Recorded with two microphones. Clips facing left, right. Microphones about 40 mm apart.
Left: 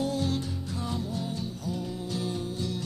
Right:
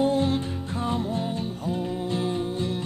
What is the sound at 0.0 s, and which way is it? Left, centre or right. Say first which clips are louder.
Music: right 6 dB; right.